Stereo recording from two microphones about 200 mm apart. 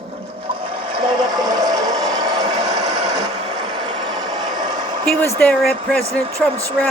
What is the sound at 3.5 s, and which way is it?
Vehicle, 20° right (ahead or behind).